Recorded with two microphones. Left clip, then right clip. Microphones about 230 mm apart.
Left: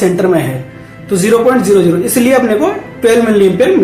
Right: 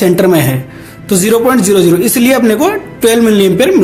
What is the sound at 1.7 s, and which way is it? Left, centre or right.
Speech, right.